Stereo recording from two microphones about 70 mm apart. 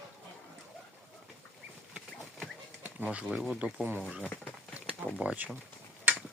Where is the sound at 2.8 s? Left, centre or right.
Centre.